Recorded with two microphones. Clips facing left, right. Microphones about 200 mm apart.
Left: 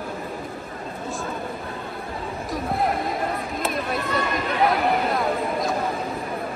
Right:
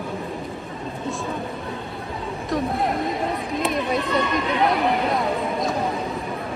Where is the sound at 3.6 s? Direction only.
Centre (ahead or behind).